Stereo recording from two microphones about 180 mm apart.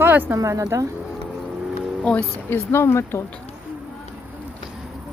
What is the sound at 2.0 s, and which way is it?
Speech, 5° left (ahead or behind).